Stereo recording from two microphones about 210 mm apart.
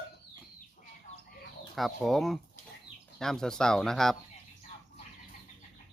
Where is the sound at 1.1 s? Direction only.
35° left (ahead or behind).